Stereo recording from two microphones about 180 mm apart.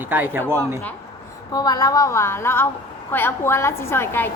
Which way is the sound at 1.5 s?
20° left (ahead or behind).